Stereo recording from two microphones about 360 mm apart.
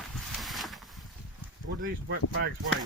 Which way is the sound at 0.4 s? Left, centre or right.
Centre.